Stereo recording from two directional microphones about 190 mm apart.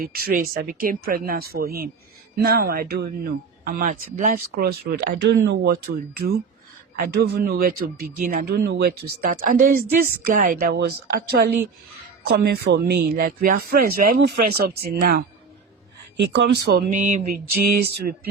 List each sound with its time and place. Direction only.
0.0 s speech: 50° right (ahead or behind)